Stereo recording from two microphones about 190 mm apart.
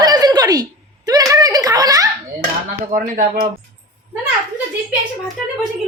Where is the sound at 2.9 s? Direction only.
45° right (ahead or behind).